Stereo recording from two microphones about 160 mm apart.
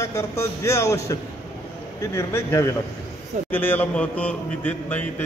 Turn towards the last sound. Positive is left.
turn(degrees=10)  # may be behind; listen again after turning